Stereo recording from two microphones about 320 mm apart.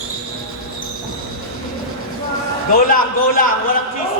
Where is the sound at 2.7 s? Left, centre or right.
Left.